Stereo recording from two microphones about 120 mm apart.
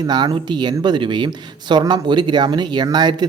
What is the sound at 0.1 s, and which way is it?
Speech, 35° right (ahead or behind).